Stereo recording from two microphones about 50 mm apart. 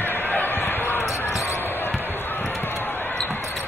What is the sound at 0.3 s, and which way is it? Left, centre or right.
Basketball bounce, left.